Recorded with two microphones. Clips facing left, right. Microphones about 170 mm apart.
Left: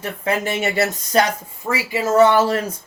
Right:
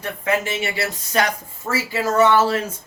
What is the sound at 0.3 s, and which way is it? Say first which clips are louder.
Speech: left 1 dB; 40° left (ahead or behind).